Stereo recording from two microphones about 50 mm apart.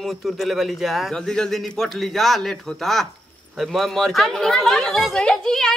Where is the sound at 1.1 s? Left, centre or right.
Centre.